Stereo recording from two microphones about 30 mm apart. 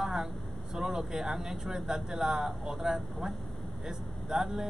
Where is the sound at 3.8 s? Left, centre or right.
Centre.